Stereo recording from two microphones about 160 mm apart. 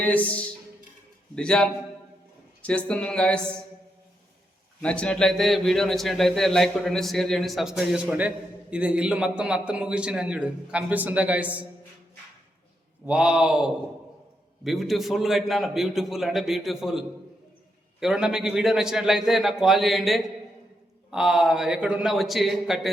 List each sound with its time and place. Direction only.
0.0 s a man's voice: 10° left (ahead or behind)
4.8 s a man's voice: 5° left (ahead or behind); by 11.6 s 10° right (ahead or behind)
13.1 s a man's voice: 5° right (ahead or behind)
18.0 s a man's voice: 5° right (ahead or behind)